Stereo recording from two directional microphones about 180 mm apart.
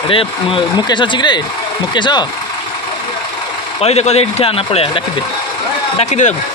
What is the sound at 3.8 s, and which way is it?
Speech, 35° left (ahead or behind).